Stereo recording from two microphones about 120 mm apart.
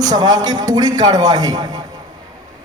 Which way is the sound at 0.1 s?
35° right (ahead or behind).